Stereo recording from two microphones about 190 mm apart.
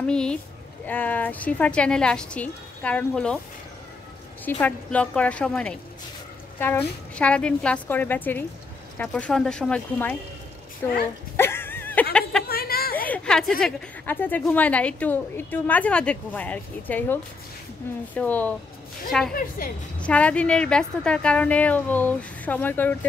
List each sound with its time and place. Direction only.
0.0 s a woman's voice: 5° left (ahead or behind)
4.5 s a woman's voice: 10° left (ahead or behind)
11.3 s a sound: 10° left (ahead or behind)
12.4 s a sound: 55° left (ahead or behind)
12.9 s a woman's voice: 10° left (ahead or behind)
19.6 s a woman's voice: 50° left (ahead or behind)
20.0 s a woman's voice: 5° left (ahead or behind)